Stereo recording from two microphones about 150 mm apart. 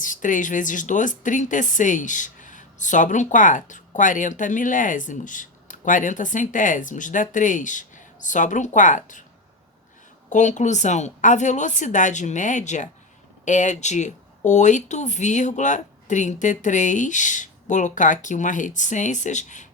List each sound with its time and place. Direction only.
0.0 s speech: 60° left (ahead or behind)
10.2 s a woman's voice: 55° left (ahead or behind)